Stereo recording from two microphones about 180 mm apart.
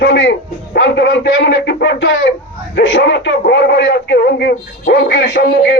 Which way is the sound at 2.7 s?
75° left (ahead or behind).